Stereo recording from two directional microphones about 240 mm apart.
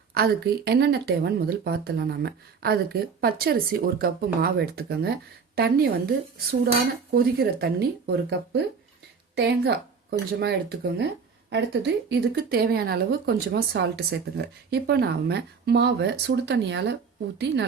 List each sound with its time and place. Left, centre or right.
0.1 s speech: right
7.1 s speech: right